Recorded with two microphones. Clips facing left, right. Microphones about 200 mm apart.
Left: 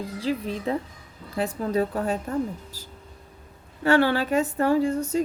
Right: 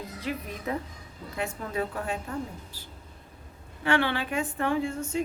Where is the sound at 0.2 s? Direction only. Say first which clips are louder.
Left 7 dB; 30° left (ahead or behind).